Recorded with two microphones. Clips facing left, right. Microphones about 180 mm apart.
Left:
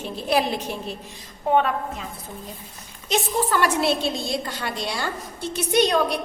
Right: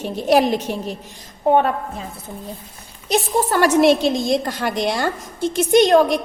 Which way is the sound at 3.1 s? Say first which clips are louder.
Right 4 dB; 40° right (ahead or behind).